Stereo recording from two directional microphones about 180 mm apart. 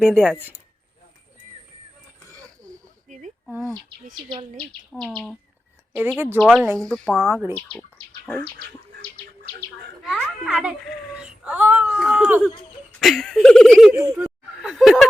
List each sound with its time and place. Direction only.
0.0 s speech: centre (ahead or behind)
2.6 s a sound: 45° right (ahead or behind)
4.2 s speech: 25° right (ahead or behind)
4.5 s speech: centre (ahead or behind)
6.4 s speech: centre (ahead or behind)
7.2 s speech: 10° right (ahead or behind)
10.0 s a child's voice: centre (ahead or behind)
13.9 s speech: 15° right (ahead or behind)
14.6 s speech: centre (ahead or behind)